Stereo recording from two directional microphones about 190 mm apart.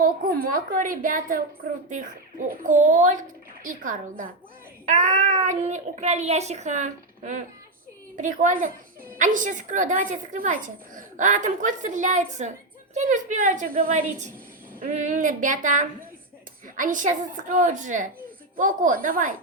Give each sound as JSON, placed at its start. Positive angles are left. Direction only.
{"t": 0.0, "sound": "a woman's voice", "side_deg": -50}
{"t": 2.5, "sound": "a woman's voice", "side_deg": -40}